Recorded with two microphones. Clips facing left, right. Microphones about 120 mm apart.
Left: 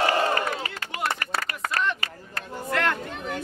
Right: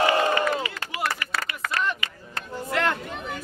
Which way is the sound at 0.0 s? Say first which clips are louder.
Right 2 dB; 45° left (ahead or behind).